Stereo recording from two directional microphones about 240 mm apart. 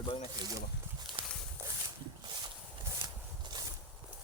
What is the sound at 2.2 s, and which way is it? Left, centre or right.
Horse, centre.